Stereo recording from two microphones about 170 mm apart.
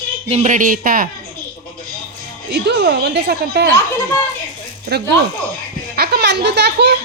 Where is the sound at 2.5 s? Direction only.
75° right (ahead or behind).